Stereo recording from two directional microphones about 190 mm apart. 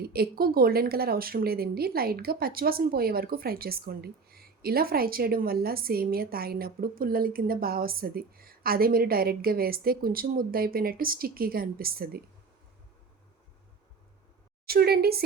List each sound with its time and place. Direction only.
0.0 s speech: 55° right (ahead or behind)
14.7 s a woman's voice: 55° right (ahead or behind)